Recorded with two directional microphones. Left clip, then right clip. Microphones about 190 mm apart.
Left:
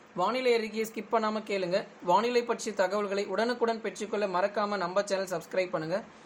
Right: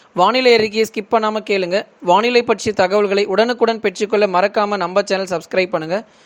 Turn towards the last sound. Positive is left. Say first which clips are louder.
# right 12 dB
turn(degrees=-45)  # may be behind; listen again after turning